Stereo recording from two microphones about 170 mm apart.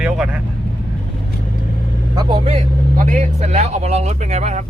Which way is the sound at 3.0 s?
45° right (ahead or behind).